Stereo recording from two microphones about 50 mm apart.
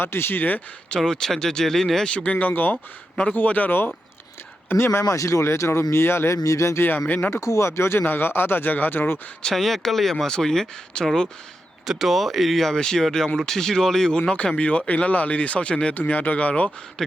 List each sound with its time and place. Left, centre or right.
0.0 s speech: left
0.9 s speech: centre
2.0 s speech: left
2.5 s speech: left
4.8 s speech: left
8.0 s speech: left
9.6 s speech: centre
11.9 s speech: centre
16.0 s speech: left
17.0 s speech: centre